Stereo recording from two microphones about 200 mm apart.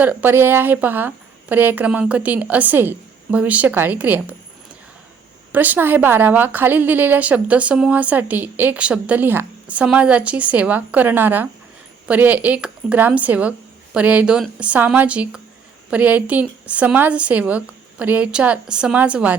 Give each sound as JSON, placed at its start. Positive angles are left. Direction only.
{"t": 0.0, "sound": "a woman's voice", "side_deg": -10}
{"t": 5.5, "sound": "a woman's voice", "side_deg": -10}